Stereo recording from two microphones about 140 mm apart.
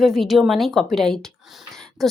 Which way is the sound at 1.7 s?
Centre (ahead or behind).